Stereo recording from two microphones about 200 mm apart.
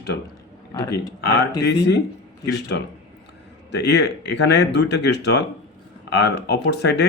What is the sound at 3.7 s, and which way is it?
Speech, 60° left (ahead or behind).